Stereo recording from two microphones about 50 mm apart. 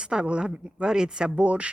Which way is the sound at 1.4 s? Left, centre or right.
Right.